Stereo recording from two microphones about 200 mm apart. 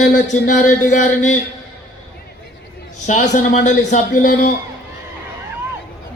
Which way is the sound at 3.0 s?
40° left (ahead or behind).